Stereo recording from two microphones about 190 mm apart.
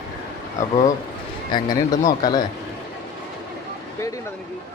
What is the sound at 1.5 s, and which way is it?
Speech, 20° left (ahead or behind).